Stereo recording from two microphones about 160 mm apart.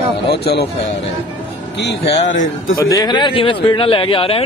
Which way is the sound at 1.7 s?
90° left.